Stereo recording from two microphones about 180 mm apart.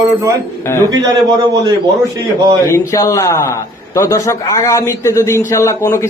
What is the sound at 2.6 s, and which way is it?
A man's voice, 15° left (ahead or behind).